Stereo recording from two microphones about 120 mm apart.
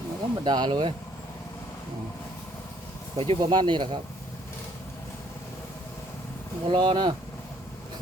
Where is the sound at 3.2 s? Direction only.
45° right (ahead or behind).